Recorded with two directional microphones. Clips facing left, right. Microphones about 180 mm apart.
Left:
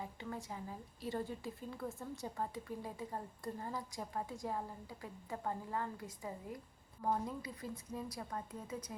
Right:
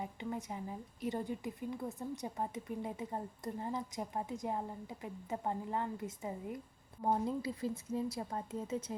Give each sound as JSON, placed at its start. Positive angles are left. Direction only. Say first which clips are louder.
{"t": 0.0, "sound": "a woman's voice", "louder": "right 4 dB", "side_deg": -20}